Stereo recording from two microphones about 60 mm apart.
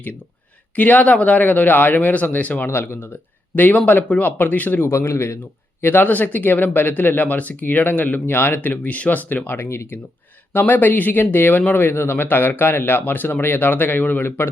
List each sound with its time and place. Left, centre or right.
0.8 s speech: left
4.9 s speech: left
5.8 s speech: left
10.5 s speech: left